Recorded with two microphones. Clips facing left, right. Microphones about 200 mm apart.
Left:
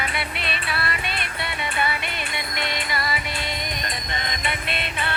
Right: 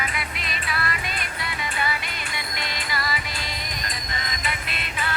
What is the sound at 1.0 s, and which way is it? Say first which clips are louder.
Music: left 2 dB; 70° left (ahead or behind).